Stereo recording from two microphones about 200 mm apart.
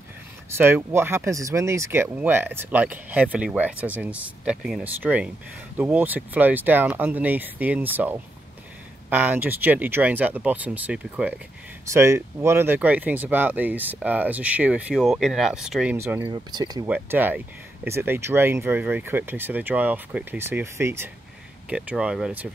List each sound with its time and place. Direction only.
0.6 s speech: 10° right (ahead or behind)
16.8 s speech: 10° right (ahead or behind)